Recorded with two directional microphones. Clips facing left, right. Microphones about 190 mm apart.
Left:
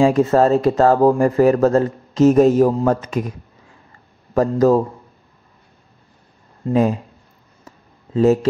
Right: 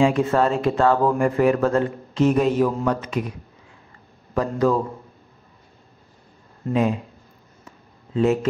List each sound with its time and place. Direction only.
0.0 s speech: 40° left (ahead or behind)
6.7 s speech: 40° left (ahead or behind)
7.6 s a sound: 40° left (ahead or behind)